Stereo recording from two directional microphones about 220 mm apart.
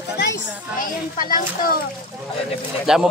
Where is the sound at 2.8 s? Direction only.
Centre (ahead or behind).